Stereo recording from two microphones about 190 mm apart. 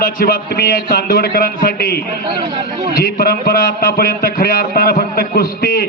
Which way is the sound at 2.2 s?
25° right (ahead or behind).